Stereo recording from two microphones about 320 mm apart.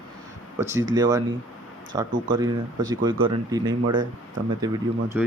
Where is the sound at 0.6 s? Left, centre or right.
Centre.